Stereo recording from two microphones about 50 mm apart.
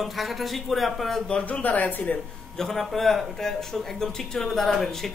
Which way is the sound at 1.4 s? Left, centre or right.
Left.